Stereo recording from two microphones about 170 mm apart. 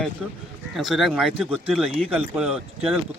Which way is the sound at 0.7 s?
Centre (ahead or behind).